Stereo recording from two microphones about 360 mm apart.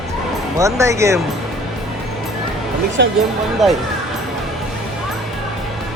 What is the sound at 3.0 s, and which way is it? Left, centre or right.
Speech, right.